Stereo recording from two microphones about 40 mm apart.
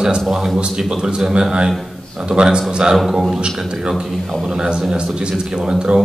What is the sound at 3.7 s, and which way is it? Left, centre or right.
A man's voice, centre.